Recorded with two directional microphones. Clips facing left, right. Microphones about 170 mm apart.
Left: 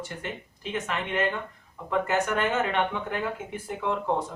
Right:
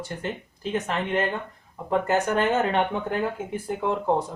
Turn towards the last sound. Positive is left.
turn(degrees=-35)  # may be behind; listen again after turning